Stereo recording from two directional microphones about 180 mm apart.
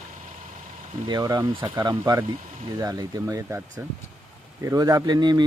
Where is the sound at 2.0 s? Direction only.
15° right (ahead or behind).